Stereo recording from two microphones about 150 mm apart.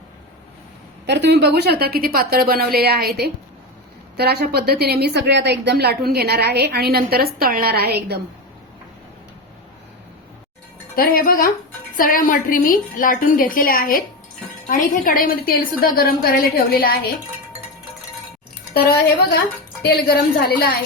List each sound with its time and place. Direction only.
1.2 s a woman's voice: 90° right
10.9 s a woman's voice: 75° left (ahead or behind)
11.9 s a woman's voice: 65° left (ahead or behind)
18.7 s a woman's voice: 90° left